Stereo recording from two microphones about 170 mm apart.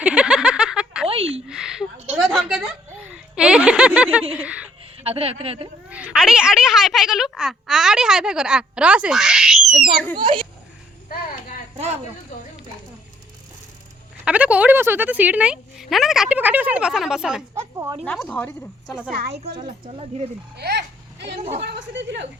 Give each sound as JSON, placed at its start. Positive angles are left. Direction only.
{"t": 0.0, "sound": "a sound", "side_deg": -5}
{"t": 1.0, "sound": "a sound", "side_deg": -35}
{"t": 1.5, "sound": "a sound", "side_deg": -5}
{"t": 5.0, "sound": "speech", "side_deg": -35}
{"t": 5.9, "sound": "speech", "side_deg": -5}
{"t": 10.2, "sound": "a child's voice", "side_deg": -30}
{"t": 14.3, "sound": "speech", "side_deg": -10}
{"t": 19.5, "sound": "speech", "side_deg": -35}
{"t": 20.6, "sound": "speech", "side_deg": -75}
{"t": 21.3, "sound": "speech", "side_deg": -35}
{"t": 21.6, "sound": "a woman's voice", "side_deg": -80}